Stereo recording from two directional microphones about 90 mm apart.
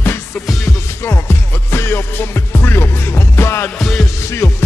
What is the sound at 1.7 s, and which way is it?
Music, 25° left (ahead or behind).